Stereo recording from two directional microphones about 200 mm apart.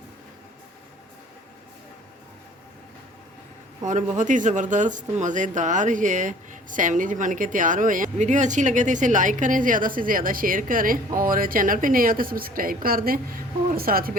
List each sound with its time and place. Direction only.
3.8 s a woman's voice: 40° right (ahead or behind)